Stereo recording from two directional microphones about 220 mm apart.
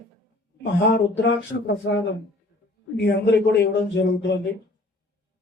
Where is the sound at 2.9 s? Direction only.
50° left (ahead or behind).